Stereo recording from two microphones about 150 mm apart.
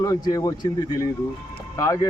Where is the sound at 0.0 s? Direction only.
20° left (ahead or behind).